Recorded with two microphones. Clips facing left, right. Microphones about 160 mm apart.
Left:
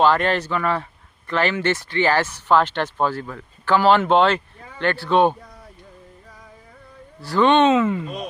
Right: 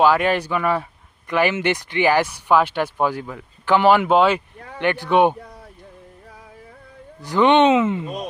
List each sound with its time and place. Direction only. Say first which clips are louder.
0.0 s speech: right 1 dB; 10° right (ahead or behind)
7.2 s speech: right 1 dB; 20° right (ahead or behind)